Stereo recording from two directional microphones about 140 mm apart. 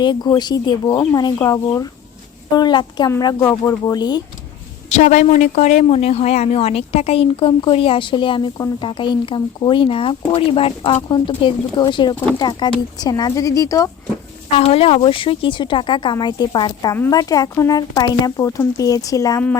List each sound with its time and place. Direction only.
0.0 s speech: 30° left (ahead or behind)
4.9 s speech: 55° left (ahead or behind); by 13.9 s 25° left (ahead or behind)
14.6 s speech: 45° left (ahead or behind); by 19.4 s 25° left (ahead or behind)